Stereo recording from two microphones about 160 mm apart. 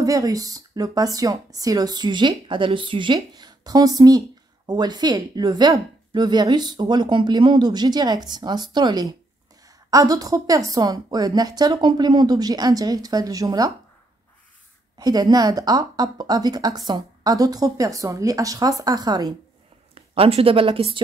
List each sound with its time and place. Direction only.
0.0 s a woman's voice: 20° right (ahead or behind)
15.0 s a woman's voice: 25° right (ahead or behind)
19.9 s speech: 35° right (ahead or behind)